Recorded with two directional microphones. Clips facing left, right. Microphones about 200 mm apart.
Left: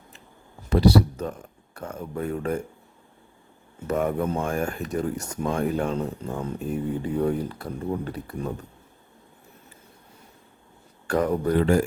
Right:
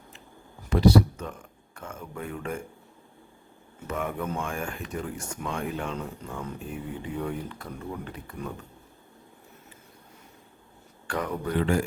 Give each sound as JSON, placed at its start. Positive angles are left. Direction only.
{"t": 0.7, "sound": "speech", "side_deg": 35}
{"t": 3.8, "sound": "speech", "side_deg": 40}
{"t": 11.0, "sound": "speech", "side_deg": 40}